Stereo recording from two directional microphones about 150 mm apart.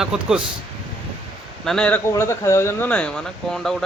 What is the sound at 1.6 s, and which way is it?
Speech, 5° left (ahead or behind).